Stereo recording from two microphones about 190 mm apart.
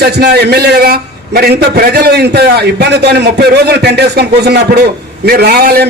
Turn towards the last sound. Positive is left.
turn(degrees=-55)  # may be behind; listen again after turning